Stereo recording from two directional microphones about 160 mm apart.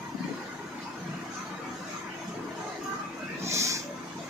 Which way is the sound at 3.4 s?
20° right (ahead or behind).